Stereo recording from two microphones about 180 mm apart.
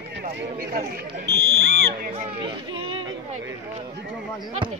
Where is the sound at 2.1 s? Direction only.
30° right (ahead or behind).